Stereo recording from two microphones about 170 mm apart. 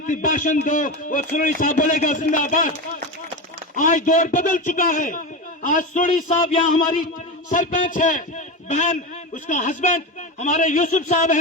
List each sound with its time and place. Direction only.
0.1 s a man's voice: 50° left (ahead or behind)
3.8 s a man's voice: 50° left (ahead or behind)
7.5 s a man's voice: 50° left (ahead or behind)